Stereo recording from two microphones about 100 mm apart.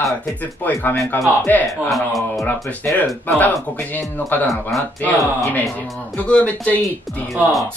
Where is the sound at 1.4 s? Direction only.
15° left (ahead or behind).